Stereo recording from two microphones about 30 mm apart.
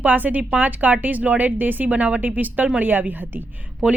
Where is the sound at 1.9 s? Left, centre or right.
Right.